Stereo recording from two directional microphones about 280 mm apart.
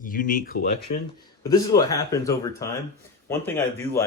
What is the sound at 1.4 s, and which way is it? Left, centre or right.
Speech, centre.